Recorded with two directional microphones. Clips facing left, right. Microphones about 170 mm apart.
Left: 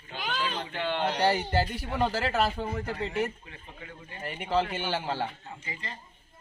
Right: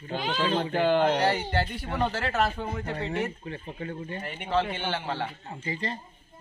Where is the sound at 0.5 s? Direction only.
50° right (ahead or behind).